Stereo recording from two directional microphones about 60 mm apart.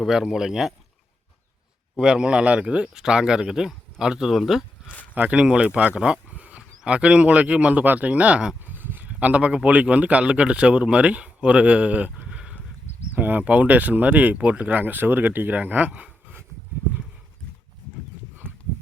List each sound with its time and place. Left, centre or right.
0.0 s speech: centre
2.0 s speech: centre
5.1 s speech: right
5.4 s speech: centre
8.6 s a sound: right
9.1 s speech: right
13.1 s speech: right
18.4 s a sound: centre